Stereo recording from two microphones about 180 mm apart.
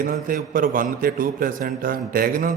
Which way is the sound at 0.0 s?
50° right (ahead or behind).